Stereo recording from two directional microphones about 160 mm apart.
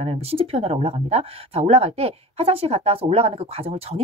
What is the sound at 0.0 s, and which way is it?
Speech, 40° right (ahead or behind).